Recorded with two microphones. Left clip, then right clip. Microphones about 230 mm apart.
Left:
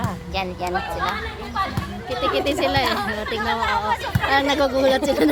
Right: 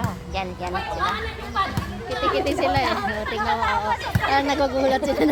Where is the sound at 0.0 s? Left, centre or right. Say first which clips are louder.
Left 2 dB; left.